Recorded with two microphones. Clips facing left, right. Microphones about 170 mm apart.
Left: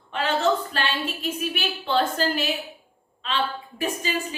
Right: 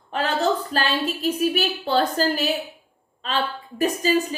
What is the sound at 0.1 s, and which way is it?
A woman's voice, 40° right (ahead or behind).